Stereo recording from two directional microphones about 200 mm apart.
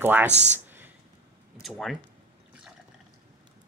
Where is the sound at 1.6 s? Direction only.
Centre (ahead or behind).